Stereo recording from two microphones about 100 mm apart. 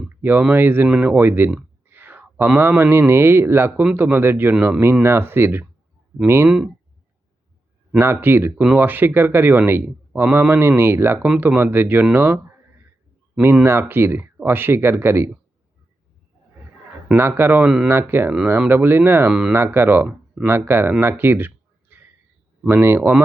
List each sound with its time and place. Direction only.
0.2 s speech: 20° right (ahead or behind)
1.9 s a sound: 20° right (ahead or behind)
2.6 s speech: 20° right (ahead or behind)
7.9 s speech: 25° right (ahead or behind)
10.1 s a man's voice: 10° right (ahead or behind)
10.3 s speech: 25° right (ahead or behind)
13.4 s speech: 20° right (ahead or behind)
17.2 s speech: 25° right (ahead or behind)
19.3 s speech: 5° right (ahead or behind)
19.5 s speech: 25° right (ahead or behind)
20.1 s a sound: 10° right (ahead or behind)
20.5 s speech: 25° right (ahead or behind)
21.0 s a sound: 25° right (ahead or behind)
22.7 s speech: 20° right (ahead or behind)